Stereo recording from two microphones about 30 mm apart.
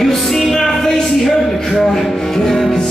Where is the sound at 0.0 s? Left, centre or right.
Centre.